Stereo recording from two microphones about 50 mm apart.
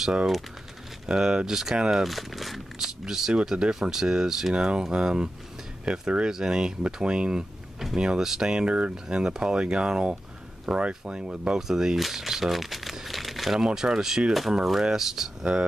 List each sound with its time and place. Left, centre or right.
1.0 s speech: centre
8.9 s speech: centre
11.6 s speech: centre
12.9 s crumpling: centre
13.7 s speech: centre